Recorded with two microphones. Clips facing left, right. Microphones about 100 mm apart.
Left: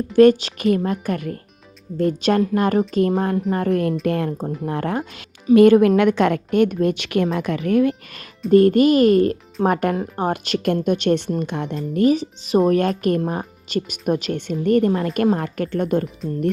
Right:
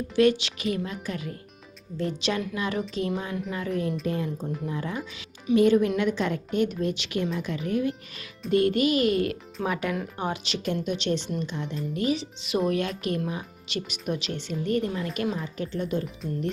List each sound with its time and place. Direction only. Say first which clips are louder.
0.2 s a woman's voice: left 9 dB; 45° left (ahead or behind); by 7.9 s 65° left (ahead or behind)
8.4 s speech: left 9 dB; 45° left (ahead or behind)
11.9 s speech: left 11 dB; 45° left (ahead or behind)